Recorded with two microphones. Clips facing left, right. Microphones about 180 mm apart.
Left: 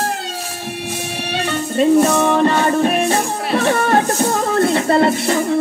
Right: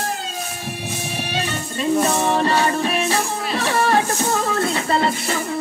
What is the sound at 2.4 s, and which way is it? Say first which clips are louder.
Music: left 5 dB; 50° left (ahead or behind).